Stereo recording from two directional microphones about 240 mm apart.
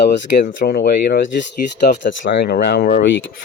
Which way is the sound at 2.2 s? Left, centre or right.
Left.